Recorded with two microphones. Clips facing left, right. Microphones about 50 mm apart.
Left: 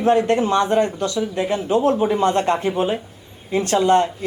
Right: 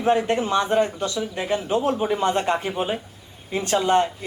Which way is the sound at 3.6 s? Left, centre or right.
Centre.